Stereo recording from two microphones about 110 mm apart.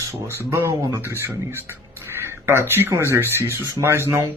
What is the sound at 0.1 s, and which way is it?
Speech, 25° right (ahead or behind).